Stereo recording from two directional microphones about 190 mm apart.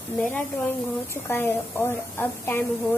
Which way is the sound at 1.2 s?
10° left (ahead or behind).